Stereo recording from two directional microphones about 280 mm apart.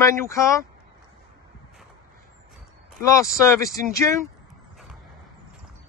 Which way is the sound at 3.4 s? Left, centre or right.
Centre.